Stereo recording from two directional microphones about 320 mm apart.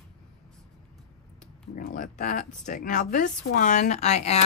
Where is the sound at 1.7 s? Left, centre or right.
Left.